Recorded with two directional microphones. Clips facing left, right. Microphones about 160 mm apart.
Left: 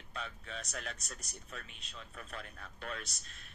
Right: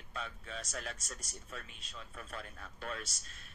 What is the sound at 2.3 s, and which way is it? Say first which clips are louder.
Speech: right 1 dB; 35° right (ahead or behind).